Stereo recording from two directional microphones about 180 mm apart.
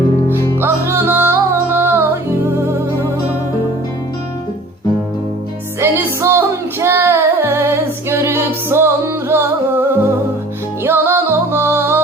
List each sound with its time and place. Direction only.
0.3 s music: 15° left (ahead or behind)
0.6 s music: 15° right (ahead or behind)
5.8 s music: 15° right (ahead or behind)